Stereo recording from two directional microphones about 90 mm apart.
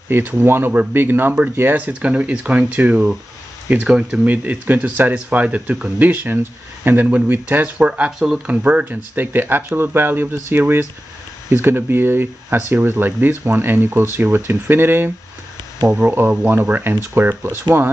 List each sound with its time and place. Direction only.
0.1 s speech: 25° right (ahead or behind)